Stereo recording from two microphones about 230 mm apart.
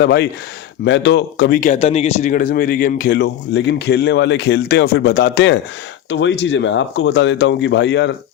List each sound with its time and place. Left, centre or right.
0.0 s speech: left